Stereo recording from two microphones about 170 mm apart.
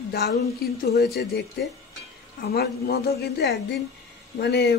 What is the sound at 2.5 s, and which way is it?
A man's voice, 70° left (ahead or behind).